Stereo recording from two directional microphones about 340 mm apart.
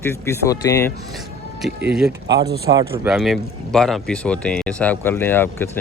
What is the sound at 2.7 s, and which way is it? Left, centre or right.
Speech, centre.